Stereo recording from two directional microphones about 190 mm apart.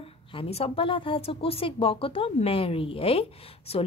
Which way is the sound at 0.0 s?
30° left (ahead or behind).